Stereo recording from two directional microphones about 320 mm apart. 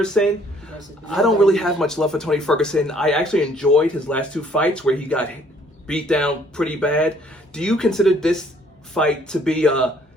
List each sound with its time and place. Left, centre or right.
0.0 s a man's voice: centre